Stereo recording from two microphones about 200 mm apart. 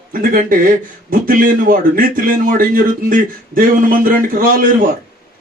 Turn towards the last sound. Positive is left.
turn(degrees=-45)  # may be behind; listen again after turning